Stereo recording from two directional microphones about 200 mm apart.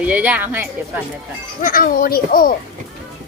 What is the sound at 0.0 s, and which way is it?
Speech, 5° right (ahead or behind).